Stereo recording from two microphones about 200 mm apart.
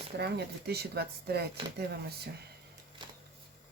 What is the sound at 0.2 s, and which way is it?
Speech, 55° right (ahead or behind).